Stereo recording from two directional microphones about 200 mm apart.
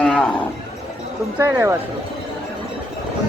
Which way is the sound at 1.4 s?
10° right (ahead or behind).